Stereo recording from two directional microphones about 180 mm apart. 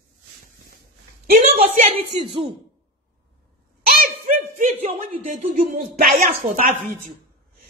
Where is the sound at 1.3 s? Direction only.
50° right (ahead or behind).